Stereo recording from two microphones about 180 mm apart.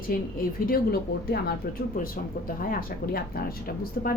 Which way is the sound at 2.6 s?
55° left (ahead or behind).